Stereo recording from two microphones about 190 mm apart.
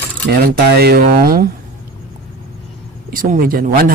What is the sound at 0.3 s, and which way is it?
Speech, 55° right (ahead or behind).